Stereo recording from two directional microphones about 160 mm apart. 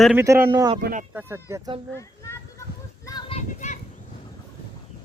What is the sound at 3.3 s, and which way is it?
Children playing, 45° left (ahead or behind).